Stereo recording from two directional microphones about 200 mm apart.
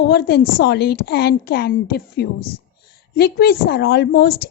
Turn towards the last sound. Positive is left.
turn(degrees=50)  # may be behind; listen again after turning